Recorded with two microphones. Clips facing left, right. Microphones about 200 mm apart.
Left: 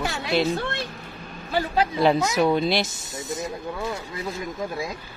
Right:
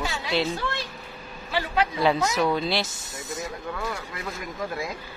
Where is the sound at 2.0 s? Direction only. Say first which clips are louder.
Left 4 dB; 20° left (ahead or behind).